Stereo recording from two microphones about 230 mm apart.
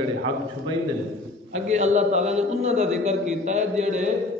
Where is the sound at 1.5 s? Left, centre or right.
Right.